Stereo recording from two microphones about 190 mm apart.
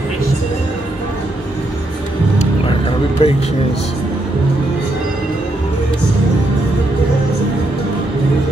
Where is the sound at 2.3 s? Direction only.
30° left (ahead or behind).